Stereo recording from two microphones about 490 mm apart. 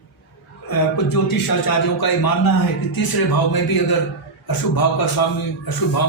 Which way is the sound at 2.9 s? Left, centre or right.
Left.